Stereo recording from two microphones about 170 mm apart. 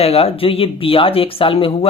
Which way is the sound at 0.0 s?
35° left (ahead or behind).